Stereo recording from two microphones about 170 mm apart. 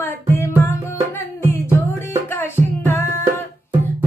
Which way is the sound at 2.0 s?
15° left (ahead or behind).